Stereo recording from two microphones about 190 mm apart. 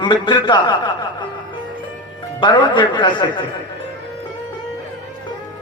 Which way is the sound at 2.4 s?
25° left (ahead or behind).